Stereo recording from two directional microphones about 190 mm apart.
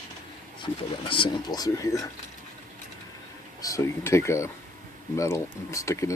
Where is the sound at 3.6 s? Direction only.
15° left (ahead or behind).